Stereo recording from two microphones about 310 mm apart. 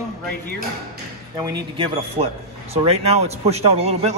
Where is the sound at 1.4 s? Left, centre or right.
Centre.